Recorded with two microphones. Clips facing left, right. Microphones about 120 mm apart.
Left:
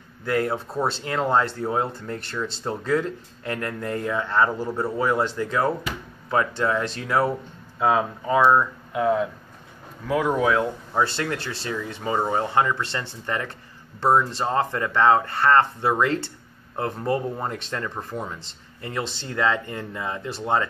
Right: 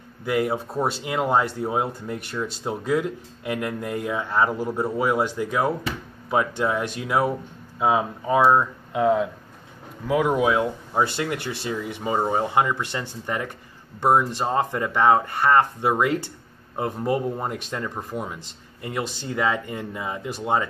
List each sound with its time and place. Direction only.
0.2 s speech: 15° right (ahead or behind)
8.5 s speech: 20° right (ahead or behind)